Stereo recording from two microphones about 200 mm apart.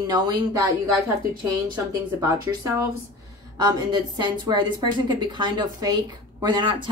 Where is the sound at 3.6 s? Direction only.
20° right (ahead or behind).